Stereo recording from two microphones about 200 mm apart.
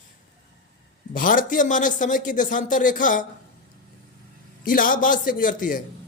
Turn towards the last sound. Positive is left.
turn(degrees=40)  # may be behind; listen again after turning